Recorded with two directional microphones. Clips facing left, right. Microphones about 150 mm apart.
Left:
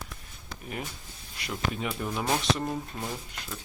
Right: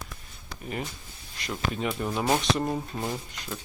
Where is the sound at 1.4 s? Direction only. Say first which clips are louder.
Right 2 dB; 5° left (ahead or behind).